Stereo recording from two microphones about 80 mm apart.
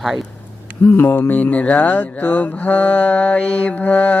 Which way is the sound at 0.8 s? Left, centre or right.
Left.